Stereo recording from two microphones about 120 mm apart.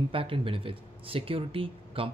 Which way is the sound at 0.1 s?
50° right (ahead or behind).